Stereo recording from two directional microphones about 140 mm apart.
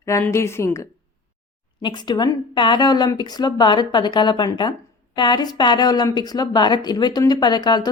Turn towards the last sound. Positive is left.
turn(degrees=30)  # may be behind; listen again after turning